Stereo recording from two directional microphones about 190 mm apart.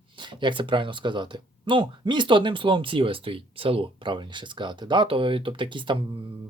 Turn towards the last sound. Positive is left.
turn(degrees=-25)  # may be behind; listen again after turning